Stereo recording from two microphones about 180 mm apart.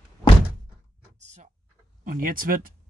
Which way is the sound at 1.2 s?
40° right (ahead or behind).